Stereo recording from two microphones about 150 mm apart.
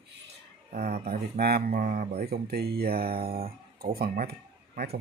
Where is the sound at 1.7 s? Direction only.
70° right (ahead or behind).